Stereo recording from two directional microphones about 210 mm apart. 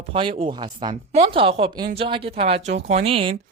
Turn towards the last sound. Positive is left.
turn(degrees=-25)  # may be behind; listen again after turning